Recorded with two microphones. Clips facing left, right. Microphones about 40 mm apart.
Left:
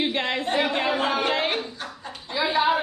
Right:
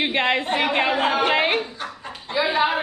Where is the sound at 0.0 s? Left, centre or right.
Right.